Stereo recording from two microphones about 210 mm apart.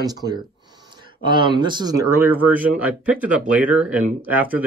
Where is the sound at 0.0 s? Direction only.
20° right (ahead or behind).